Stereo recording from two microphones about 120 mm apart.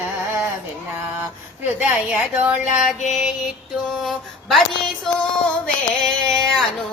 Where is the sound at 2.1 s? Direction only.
15° right (ahead or behind).